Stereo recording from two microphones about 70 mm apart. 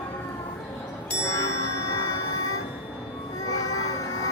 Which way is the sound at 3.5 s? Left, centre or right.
Left.